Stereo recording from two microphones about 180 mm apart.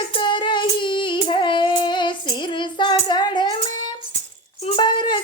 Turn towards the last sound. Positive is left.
turn(degrees=25)  # may be behind; listen again after turning